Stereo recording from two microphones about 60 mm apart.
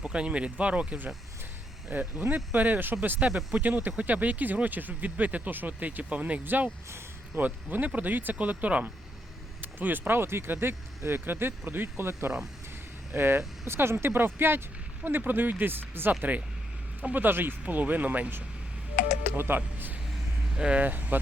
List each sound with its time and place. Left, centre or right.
0.0 s speech: centre; by 3.2 s right
3.2 s speech: centre
3.6 s speech: right
20.6 s speech: centre
20.8 s speech: right